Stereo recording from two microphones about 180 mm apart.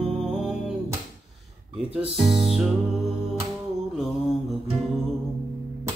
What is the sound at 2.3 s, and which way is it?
Music, centre (ahead or behind).